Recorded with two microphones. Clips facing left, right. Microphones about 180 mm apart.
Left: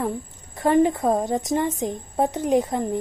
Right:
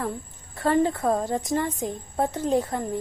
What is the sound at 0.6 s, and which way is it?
A woman's voice, 20° left (ahead or behind).